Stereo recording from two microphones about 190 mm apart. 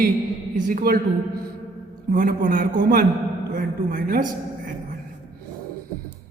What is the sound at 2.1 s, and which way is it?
Speech, 50° right (ahead or behind).